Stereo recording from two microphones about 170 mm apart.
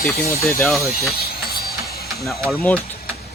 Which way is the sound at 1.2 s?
65° left (ahead or behind).